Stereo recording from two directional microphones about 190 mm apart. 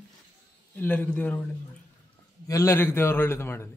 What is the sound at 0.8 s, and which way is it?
Speech, 10° left (ahead or behind).